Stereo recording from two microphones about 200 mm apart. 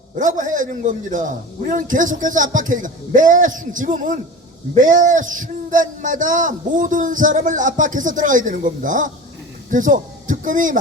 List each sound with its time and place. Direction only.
0.2 s a man's voice: 40° right (ahead or behind)